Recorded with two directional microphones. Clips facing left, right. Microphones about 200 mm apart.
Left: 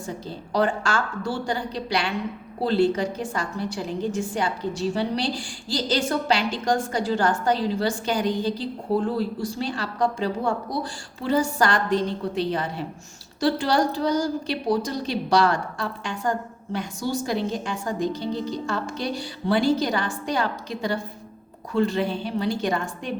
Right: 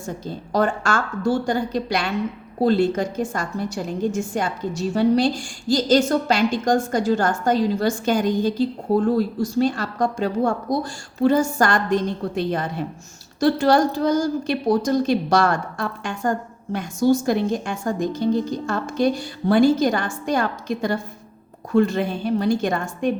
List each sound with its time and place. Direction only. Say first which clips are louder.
0.3 s a woman's voice: right 2 dB; 45° right (ahead or behind)